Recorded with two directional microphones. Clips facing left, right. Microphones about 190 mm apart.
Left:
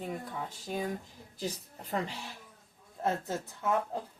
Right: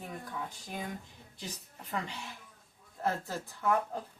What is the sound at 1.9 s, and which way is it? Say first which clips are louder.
Speech: left 3 dB; 35° left (ahead or behind).